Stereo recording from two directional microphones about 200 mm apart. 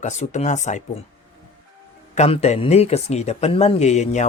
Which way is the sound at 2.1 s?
35° left (ahead or behind).